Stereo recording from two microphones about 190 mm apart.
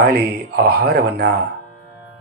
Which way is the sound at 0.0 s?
55° right (ahead or behind).